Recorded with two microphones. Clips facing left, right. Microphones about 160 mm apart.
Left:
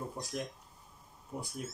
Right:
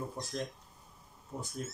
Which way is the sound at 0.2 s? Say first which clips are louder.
Right 1 dB; 10° left (ahead or behind).